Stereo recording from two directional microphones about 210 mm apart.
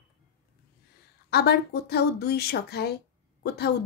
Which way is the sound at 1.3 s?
50° left (ahead or behind).